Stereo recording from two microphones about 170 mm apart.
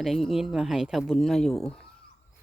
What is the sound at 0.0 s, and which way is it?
Speech, centre (ahead or behind).